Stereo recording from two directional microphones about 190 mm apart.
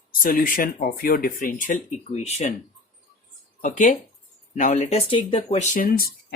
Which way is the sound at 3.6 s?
45° left (ahead or behind).